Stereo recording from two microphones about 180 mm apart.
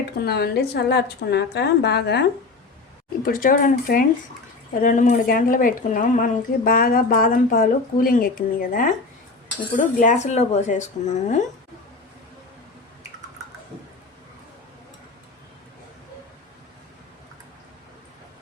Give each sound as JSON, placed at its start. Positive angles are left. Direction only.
{"t": 0.3, "sound": "a woman's voice", "side_deg": 60}
{"t": 3.2, "sound": "speech", "side_deg": 55}